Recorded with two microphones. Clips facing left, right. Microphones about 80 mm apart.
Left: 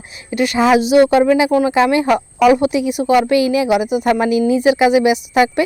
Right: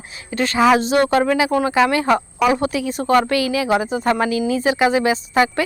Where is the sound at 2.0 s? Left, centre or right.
Right.